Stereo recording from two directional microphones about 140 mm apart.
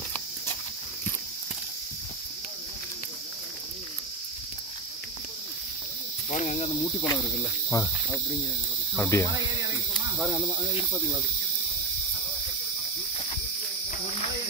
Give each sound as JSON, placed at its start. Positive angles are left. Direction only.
{"t": 6.3, "sound": "speech", "side_deg": 55}
{"t": 7.7, "sound": "insect", "side_deg": 25}
{"t": 8.9, "sound": "speech", "side_deg": 15}
{"t": 10.3, "sound": "speech", "side_deg": -15}